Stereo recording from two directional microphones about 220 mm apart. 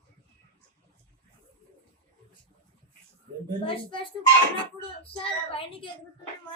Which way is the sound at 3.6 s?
25° left (ahead or behind).